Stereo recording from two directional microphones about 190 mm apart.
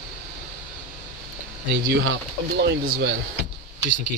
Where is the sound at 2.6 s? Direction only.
55° right (ahead or behind).